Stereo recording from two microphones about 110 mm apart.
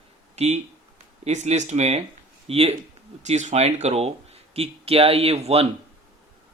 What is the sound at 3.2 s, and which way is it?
Speech, 90° right.